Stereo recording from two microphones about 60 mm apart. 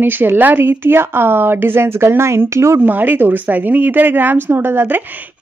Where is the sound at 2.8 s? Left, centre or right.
Right.